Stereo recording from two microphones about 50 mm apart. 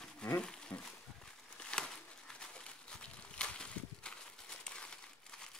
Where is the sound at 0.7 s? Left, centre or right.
Left.